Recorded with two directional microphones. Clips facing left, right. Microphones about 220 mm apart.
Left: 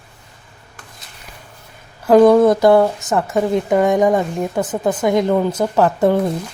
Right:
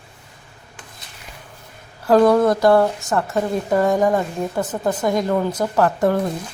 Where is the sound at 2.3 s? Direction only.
20° left (ahead or behind).